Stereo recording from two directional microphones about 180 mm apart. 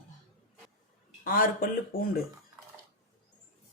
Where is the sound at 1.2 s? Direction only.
50° left (ahead or behind).